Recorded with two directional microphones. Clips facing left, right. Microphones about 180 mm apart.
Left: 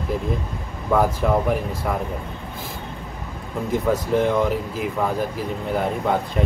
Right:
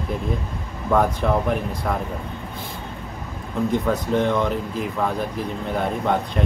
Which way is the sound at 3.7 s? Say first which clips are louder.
Left 3 dB; centre (ahead or behind).